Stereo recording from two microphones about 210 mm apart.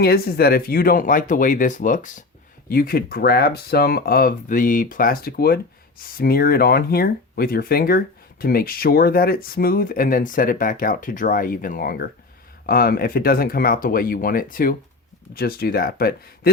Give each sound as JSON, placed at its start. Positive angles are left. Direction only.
{"t": 0.0, "sound": "speech", "side_deg": 45}